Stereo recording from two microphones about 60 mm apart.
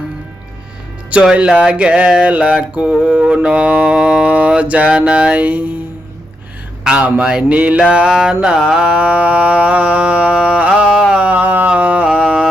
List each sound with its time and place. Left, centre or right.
1.1 s mantra: right
6.8 s speech: centre
7.2 s mantra: centre
11.2 s a sound: right